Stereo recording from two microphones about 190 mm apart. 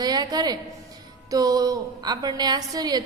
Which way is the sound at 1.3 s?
20° right (ahead or behind).